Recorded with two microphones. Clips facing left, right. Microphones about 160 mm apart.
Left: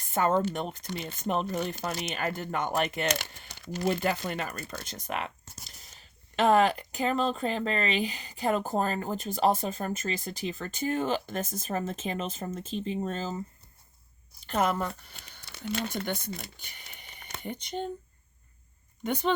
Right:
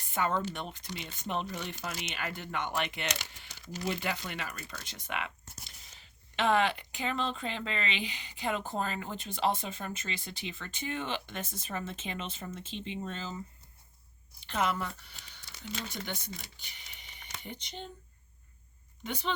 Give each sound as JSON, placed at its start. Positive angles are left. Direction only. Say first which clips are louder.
{"t": 0.0, "sound": "speech", "louder": "left 6 dB", "side_deg": 45}
{"t": 3.1, "sound": "speech", "louder": "left 7 dB", "side_deg": 55}
{"t": 14.4, "sound": "speech", "louder": "left 4 dB", "side_deg": 45}
{"t": 15.1, "sound": "speech", "louder": "left 4 dB", "side_deg": 55}
{"t": 19.0, "sound": "speech", "louder": "left 8 dB", "side_deg": 50}